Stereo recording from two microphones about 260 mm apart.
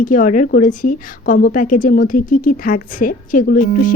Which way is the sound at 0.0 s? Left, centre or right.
Left.